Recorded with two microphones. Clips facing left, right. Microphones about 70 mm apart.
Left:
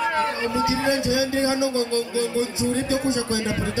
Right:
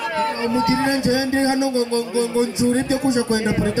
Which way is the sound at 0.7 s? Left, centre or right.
Right.